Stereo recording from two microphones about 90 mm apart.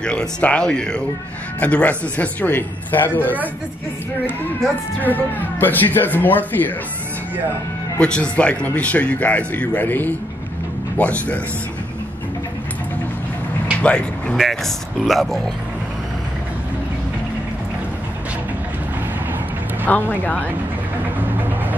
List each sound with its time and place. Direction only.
0.0 s a man's voice: 10° left (ahead or behind)
5.0 s a man's voice: 20° left (ahead or behind)
8.0 s a man's voice: 10° left (ahead or behind)
13.8 s a man's voice: 15° left (ahead or behind)
14.3 s speech: centre (ahead or behind)
19.9 s a man's voice: 20° left (ahead or behind)